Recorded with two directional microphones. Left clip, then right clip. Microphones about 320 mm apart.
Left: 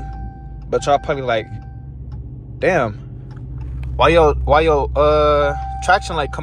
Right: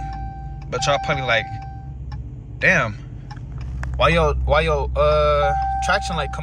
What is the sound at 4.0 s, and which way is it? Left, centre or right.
Speech, centre.